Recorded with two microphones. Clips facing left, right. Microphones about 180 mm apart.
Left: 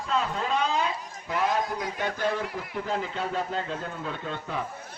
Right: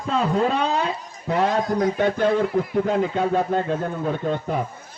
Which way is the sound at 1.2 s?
55° right (ahead or behind).